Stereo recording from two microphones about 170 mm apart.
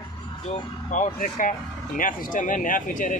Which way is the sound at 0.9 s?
50° left (ahead or behind).